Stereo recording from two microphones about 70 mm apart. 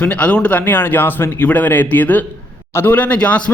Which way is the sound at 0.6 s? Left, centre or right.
Left.